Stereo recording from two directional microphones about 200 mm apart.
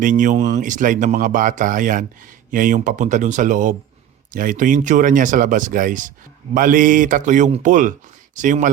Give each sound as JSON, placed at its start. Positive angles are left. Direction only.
{"t": 0.0, "sound": "speech", "side_deg": -40}